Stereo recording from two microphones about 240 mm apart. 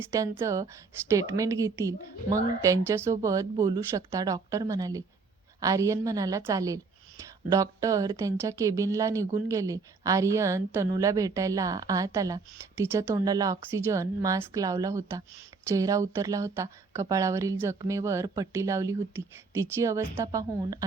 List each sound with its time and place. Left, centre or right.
0.0 s speech: centre